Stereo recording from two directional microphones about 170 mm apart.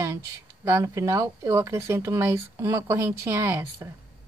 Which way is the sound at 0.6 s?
20° right (ahead or behind).